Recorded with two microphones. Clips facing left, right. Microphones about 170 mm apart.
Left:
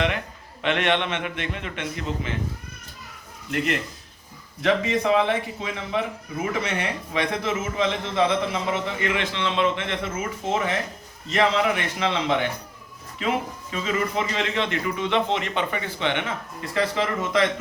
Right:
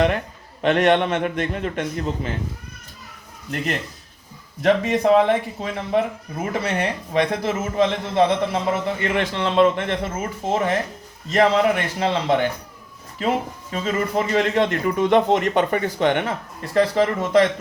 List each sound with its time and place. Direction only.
0.6 s a man's voice: 40° right (ahead or behind)
4.6 s a man's voice: 40° right (ahead or behind)